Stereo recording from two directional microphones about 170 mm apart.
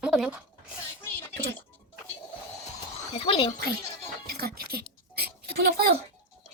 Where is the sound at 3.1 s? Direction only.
35° left (ahead or behind).